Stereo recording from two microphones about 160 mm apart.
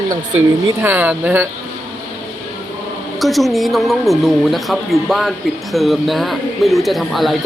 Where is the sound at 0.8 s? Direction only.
10° right (ahead or behind).